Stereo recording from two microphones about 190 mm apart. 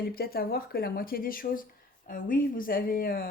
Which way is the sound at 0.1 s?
50° left (ahead or behind).